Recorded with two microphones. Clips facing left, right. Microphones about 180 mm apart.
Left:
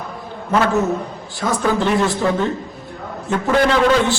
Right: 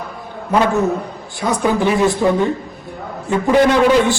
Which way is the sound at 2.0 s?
15° right (ahead or behind).